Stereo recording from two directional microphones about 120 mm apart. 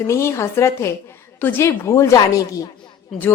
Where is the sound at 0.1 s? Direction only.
25° left (ahead or behind).